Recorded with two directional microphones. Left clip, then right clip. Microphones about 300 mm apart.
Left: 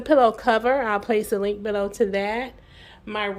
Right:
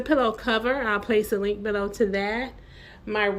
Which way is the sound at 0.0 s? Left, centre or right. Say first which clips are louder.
Left 5 dB; centre.